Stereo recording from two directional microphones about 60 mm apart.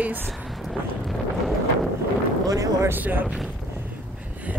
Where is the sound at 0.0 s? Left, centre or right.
Right.